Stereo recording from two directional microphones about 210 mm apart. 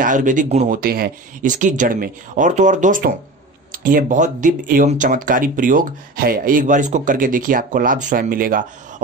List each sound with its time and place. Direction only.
0.0 s speech: 40° right (ahead or behind)